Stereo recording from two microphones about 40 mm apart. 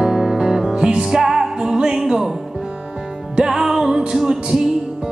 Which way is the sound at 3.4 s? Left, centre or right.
Centre.